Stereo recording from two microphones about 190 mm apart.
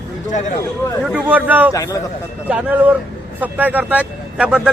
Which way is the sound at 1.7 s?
15° left (ahead or behind).